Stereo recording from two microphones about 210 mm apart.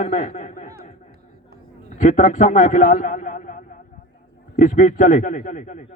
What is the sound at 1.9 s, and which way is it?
A man's voice, 35° left (ahead or behind).